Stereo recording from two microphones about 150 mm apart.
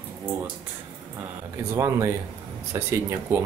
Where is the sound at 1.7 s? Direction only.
20° right (ahead or behind).